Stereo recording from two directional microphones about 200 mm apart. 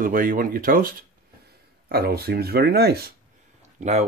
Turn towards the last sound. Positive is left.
turn(degrees=-35)  # may be behind; listen again after turning